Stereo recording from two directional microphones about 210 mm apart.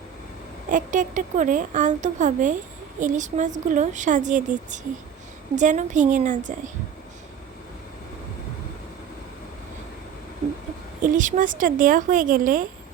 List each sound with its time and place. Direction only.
0.7 s speech: 35° right (ahead or behind)
11.0 s speech: 40° right (ahead or behind)